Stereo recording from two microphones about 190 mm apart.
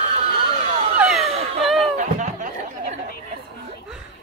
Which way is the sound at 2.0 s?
40° right (ahead or behind).